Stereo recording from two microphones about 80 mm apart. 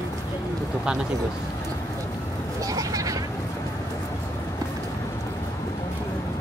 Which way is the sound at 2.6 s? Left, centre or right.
Right.